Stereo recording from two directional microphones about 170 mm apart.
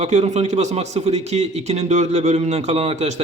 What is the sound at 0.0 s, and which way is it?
A man's voice, 40° right (ahead or behind).